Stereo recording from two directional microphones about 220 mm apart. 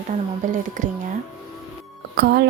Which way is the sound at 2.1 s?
50° right (ahead or behind).